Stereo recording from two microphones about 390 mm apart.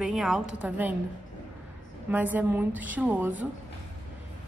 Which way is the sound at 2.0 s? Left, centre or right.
Centre.